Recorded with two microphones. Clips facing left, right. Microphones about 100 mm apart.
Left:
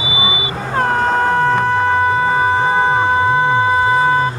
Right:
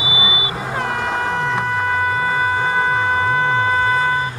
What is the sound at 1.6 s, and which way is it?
Music, 35° left (ahead or behind).